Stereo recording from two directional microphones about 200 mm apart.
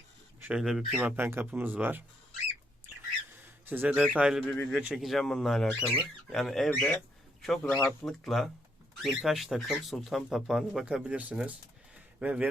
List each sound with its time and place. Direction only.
0.3 s speech: 5° right (ahead or behind)
3.7 s speech: 10° right (ahead or behind)
4.4 s speech: 10° left (ahead or behind); by 12.5 s 10° right (ahead or behind)